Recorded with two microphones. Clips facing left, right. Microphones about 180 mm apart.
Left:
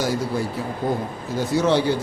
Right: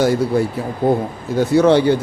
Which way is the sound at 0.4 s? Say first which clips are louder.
Right 7 dB; 60° right (ahead or behind).